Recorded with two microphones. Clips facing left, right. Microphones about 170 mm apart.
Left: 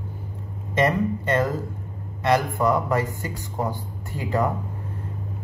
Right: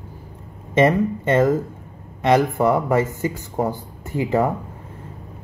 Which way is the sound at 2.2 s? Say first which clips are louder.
Right 4 dB; 15° right (ahead or behind).